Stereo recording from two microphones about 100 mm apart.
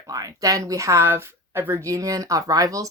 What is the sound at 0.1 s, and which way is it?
Speech, 35° right (ahead or behind).